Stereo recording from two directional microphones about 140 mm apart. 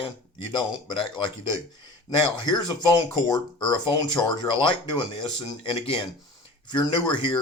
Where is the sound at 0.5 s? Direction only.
35° left (ahead or behind).